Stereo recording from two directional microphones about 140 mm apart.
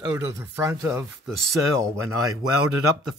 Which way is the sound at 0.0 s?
20° right (ahead or behind).